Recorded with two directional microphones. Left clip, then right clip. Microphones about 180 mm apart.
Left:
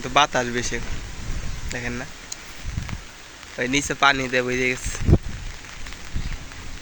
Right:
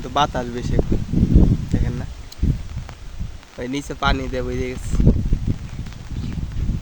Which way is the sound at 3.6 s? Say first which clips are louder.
Left 4 dB; 15° right (ahead or behind).